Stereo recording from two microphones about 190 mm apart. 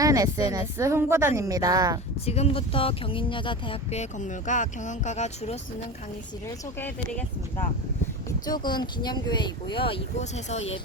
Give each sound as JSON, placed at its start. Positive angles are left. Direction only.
{"t": 0.0, "sound": "a woman's voice", "side_deg": -20}
{"t": 2.2, "sound": "speech", "side_deg": 35}
{"t": 4.2, "sound": "speech", "side_deg": 40}
{"t": 6.7, "sound": "speech", "side_deg": 10}
{"t": 8.4, "sound": "speech", "side_deg": 20}